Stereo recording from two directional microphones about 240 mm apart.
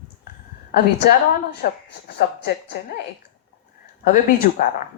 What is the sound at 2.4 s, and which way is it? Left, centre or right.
Speech, left.